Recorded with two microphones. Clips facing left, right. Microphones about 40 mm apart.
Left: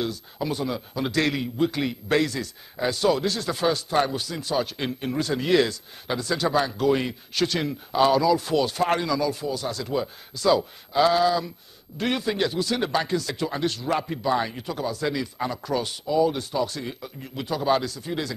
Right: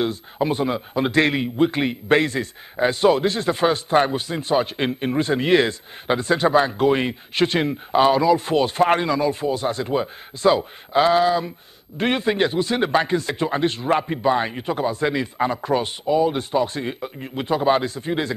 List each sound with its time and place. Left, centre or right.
0.0 s a man's voice: right